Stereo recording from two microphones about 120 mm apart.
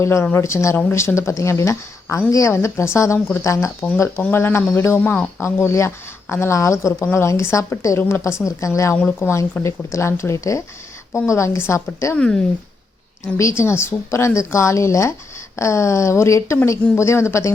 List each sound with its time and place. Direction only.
0.0 s speech: 20° left (ahead or behind)
12.1 s speech: 10° left (ahead or behind)
13.3 s speech: 20° left (ahead or behind)